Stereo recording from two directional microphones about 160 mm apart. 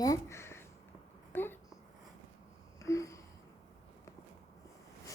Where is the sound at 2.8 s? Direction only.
20° left (ahead or behind).